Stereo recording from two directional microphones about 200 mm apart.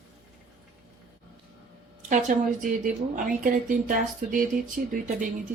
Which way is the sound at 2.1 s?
40° right (ahead or behind).